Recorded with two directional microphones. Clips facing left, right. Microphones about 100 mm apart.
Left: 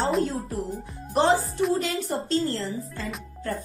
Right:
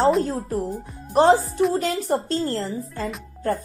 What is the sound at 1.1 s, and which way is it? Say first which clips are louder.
A woman's voice: right 5 dB; 40° right (ahead or behind).